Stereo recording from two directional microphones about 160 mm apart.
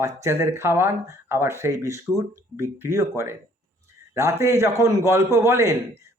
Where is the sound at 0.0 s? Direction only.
15° right (ahead or behind).